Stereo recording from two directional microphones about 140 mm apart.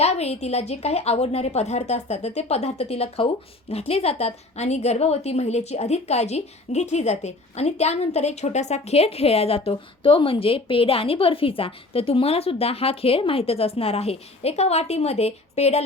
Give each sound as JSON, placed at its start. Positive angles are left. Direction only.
{"t": 0.0, "sound": "a woman's voice", "side_deg": 50}